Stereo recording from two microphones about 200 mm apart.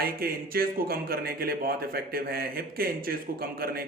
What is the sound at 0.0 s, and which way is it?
A man's voice, 50° right (ahead or behind).